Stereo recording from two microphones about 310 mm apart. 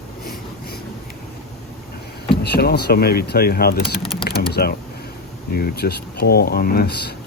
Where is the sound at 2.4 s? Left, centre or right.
Left.